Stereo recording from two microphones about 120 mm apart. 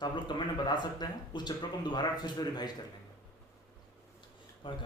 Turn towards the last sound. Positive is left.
turn(degrees=40)  # may be behind; listen again after turning